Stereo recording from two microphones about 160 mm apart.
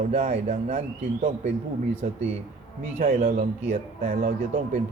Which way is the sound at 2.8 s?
50° right (ahead or behind).